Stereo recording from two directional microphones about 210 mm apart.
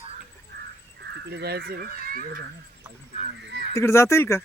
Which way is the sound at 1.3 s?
50° right (ahead or behind).